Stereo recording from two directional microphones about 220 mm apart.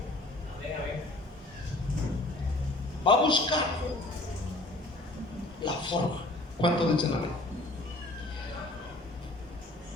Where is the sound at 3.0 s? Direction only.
20° left (ahead or behind).